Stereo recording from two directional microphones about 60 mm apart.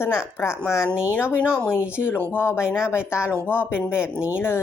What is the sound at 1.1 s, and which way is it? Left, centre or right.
Speech, left.